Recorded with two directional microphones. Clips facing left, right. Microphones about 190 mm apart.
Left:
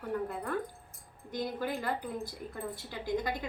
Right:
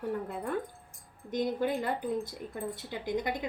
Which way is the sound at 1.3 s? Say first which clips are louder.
Right 5 dB; 20° right (ahead or behind).